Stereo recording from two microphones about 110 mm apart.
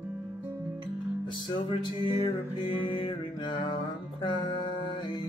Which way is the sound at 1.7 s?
50° left (ahead or behind).